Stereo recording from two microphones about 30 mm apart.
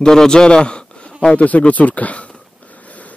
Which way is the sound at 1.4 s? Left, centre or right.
Left.